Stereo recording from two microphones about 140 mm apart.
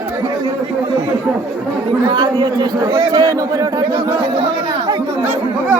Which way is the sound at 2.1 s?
35° right (ahead or behind).